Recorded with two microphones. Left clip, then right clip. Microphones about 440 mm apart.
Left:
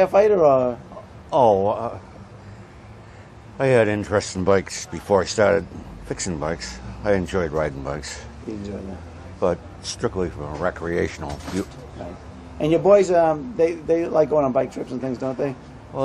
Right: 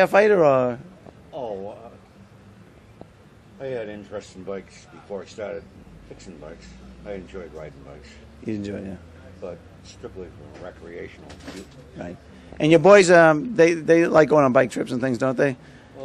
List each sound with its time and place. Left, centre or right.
0.0 s speech: right
1.3 s speech: left
3.5 s speech: left
9.4 s a man's voice: left
12.5 s a man's voice: right